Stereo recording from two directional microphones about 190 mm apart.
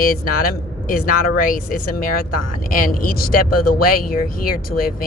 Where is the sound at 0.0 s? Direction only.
50° left (ahead or behind).